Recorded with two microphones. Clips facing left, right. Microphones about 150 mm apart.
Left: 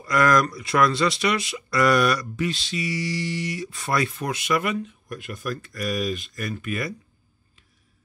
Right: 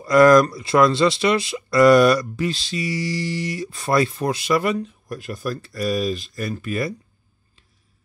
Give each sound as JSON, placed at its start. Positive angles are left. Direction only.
{"t": 0.0, "sound": "speech", "side_deg": -30}